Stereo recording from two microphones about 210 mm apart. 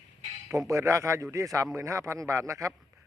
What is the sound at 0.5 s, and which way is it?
Speech, 15° right (ahead or behind).